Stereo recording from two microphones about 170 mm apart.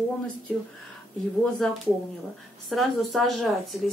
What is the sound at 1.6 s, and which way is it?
Speech, 5° left (ahead or behind).